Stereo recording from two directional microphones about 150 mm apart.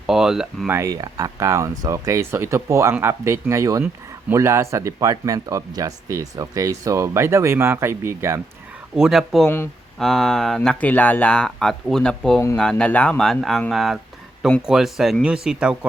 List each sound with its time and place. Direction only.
0.1 s speech: 5° right (ahead or behind)
0.7 s speech: 20° right (ahead or behind)
9.0 s speech: centre (ahead or behind)